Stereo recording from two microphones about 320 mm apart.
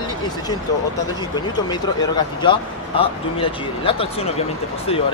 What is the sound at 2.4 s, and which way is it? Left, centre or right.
Speech, centre.